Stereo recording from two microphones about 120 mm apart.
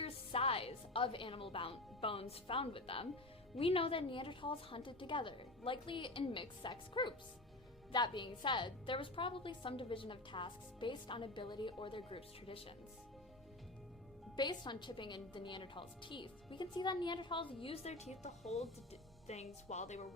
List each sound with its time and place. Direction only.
0.0 s a woman's voice: 55° left (ahead or behind)
14.3 s a woman's voice: 40° left (ahead or behind); by 20.1 s 70° left (ahead or behind)